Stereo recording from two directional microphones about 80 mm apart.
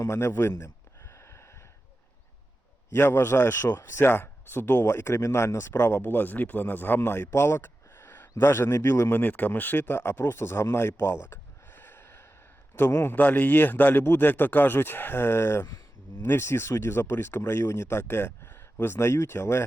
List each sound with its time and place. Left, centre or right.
0.0 s a sound: left
2.9 s speech: left
4.9 s speech: left